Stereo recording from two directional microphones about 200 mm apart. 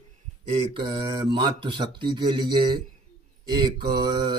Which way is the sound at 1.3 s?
25° right (ahead or behind).